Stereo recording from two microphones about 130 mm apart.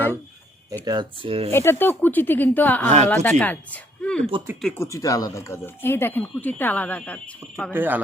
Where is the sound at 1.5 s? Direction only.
20° left (ahead or behind).